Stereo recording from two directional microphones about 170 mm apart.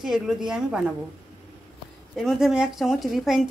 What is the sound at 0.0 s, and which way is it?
Speech, centre (ahead or behind).